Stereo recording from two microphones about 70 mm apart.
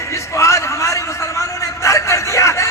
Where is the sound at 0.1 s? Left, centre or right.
Left.